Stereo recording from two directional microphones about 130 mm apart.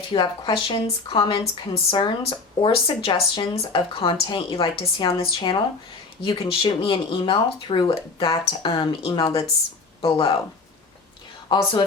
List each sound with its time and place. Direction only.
0.1 s speech: 40° left (ahead or behind)
11.5 s speech: 35° left (ahead or behind)